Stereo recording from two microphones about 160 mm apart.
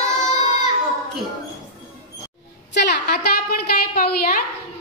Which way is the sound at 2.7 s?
75° left (ahead or behind).